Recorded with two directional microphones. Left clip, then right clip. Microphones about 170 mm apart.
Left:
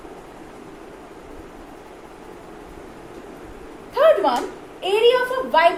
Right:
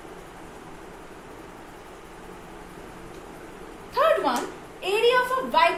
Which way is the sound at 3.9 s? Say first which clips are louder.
Left 6 dB; 15° right (ahead or behind).